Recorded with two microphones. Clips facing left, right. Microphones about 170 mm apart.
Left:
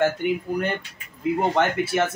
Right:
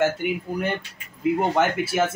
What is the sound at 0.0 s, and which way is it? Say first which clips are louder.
A man's voice: left 1 dB; 5° right (ahead or behind).